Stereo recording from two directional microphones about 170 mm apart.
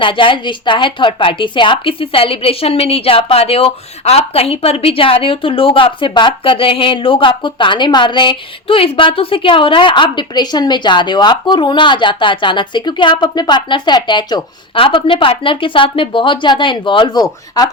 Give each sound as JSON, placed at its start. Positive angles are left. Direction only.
{"t": 0.0, "sound": "a woman's voice", "side_deg": 30}